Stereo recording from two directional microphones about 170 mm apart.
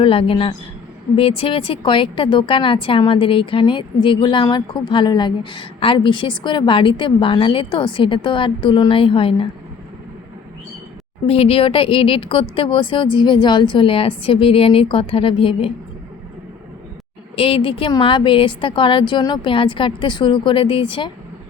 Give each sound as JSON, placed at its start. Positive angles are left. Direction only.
{"t": 0.0, "sound": "a woman's voice", "side_deg": 30}
{"t": 11.3, "sound": "speech", "side_deg": 35}
{"t": 17.3, "sound": "a woman's voice", "side_deg": 30}